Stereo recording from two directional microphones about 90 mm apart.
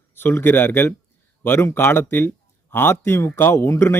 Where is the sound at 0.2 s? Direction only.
25° left (ahead or behind).